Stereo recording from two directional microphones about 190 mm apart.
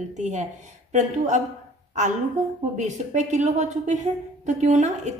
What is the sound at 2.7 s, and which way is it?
A woman's voice, 40° right (ahead or behind).